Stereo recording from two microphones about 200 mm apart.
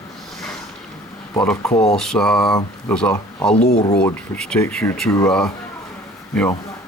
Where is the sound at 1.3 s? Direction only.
10° left (ahead or behind).